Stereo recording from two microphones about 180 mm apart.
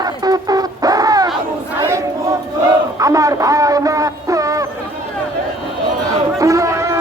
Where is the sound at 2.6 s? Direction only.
20° right (ahead or behind).